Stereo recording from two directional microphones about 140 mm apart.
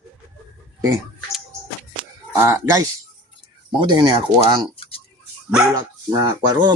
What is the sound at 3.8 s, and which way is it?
Speech, 30° right (ahead or behind).